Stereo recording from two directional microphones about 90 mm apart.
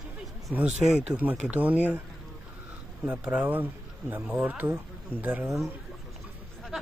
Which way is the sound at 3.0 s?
10° right (ahead or behind).